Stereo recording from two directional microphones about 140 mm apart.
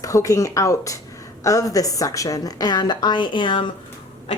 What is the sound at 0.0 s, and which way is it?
A woman's voice, 25° left (ahead or behind).